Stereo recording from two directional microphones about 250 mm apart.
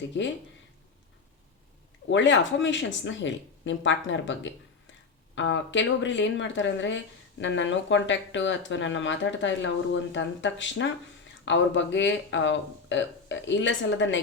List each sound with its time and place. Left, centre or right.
0.1 s speech: left
2.0 s speech: left